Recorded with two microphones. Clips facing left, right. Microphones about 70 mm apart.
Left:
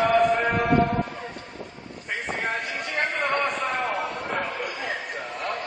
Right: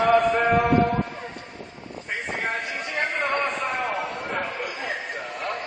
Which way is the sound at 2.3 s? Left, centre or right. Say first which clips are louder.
Right 1 dB; right.